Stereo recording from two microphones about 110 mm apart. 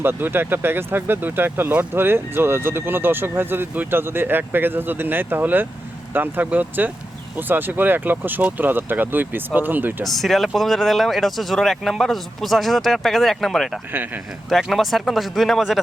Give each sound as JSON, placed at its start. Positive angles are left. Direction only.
{"t": 0.0, "sound": "speech", "side_deg": -20}
{"t": 10.0, "sound": "speech", "side_deg": 0}